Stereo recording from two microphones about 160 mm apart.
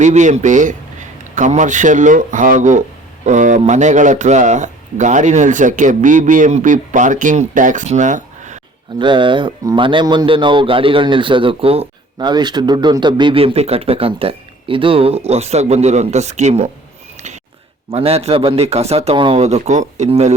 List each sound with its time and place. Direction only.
0.0 s a man's voice: 50° right (ahead or behind)
9.0 s a man's voice: 30° right (ahead or behind); by 16.6 s 45° right (ahead or behind)
17.9 s a man's voice: 40° right (ahead or behind)